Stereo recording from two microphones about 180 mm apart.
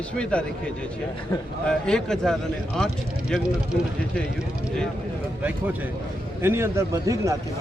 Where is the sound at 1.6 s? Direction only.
5° left (ahead or behind).